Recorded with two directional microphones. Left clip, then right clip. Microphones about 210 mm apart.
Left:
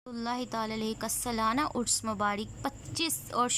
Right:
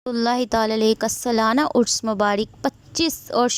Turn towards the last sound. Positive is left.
turn(degrees=-30)  # may be behind; listen again after turning